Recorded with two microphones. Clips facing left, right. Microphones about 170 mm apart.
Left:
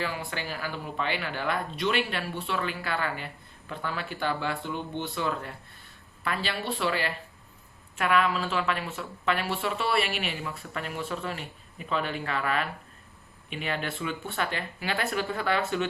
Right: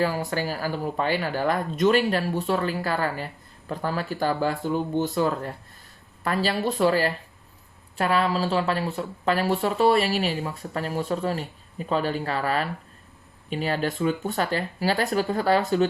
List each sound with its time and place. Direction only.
0.0 s speech: 40° right (ahead or behind)